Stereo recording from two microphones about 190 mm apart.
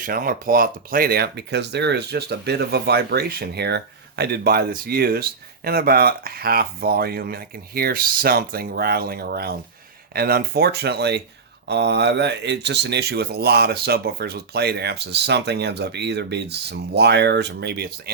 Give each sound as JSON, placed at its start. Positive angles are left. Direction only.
{"t": 0.0, "sound": "speech", "side_deg": -50}